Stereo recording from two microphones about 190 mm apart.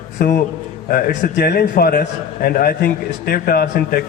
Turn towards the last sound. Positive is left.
turn(degrees=50)  # may be behind; listen again after turning